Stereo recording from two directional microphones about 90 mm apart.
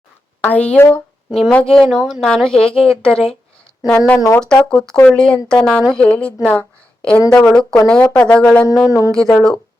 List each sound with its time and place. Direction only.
0.4 s a woman's voice: 15° left (ahead or behind)
1.3 s a woman's voice: 5° left (ahead or behind)
1.9 s speech: 5° right (ahead or behind)
2.2 s a woman's voice: 5° left (ahead or behind)
3.9 s speech: 20° left (ahead or behind)
4.4 s a woman's voice: 10° left (ahead or behind)
8.9 s speech: 35° left (ahead or behind)
9.1 s a woman's voice: 5° left (ahead or behind)